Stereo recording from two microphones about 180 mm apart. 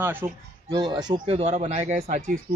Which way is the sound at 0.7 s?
25° right (ahead or behind).